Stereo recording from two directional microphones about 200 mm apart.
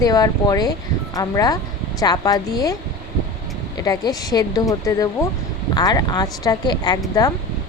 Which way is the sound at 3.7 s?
20° left (ahead or behind).